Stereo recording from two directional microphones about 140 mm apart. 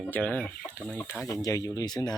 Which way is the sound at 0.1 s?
10° left (ahead or behind).